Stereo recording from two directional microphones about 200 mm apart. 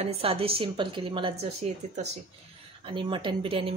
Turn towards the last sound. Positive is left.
turn(degrees=-30)  # may be behind; listen again after turning